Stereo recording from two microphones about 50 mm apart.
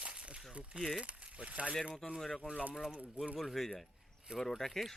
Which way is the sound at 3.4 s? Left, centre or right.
Centre.